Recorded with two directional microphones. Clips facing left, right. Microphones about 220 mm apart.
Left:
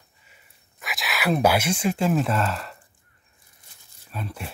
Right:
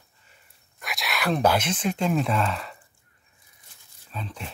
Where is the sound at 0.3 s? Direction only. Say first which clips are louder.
Left 2 dB; centre (ahead or behind).